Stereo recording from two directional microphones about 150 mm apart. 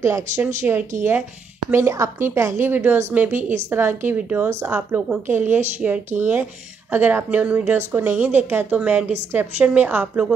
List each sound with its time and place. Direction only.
0.0 s a woman's voice: 15° right (ahead or behind)
1.7 s a woman's voice: 20° right (ahead or behind)